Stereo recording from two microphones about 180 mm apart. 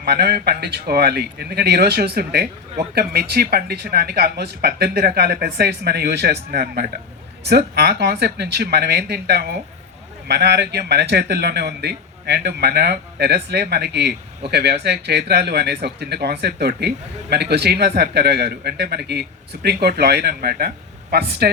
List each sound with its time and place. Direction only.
0.0 s speech: 60° right (ahead or behind)